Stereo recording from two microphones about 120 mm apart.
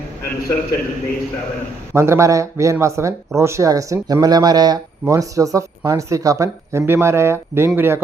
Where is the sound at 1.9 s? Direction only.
25° right (ahead or behind).